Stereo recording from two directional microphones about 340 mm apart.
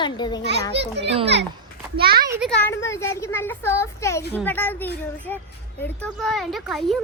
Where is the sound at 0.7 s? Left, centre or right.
Right.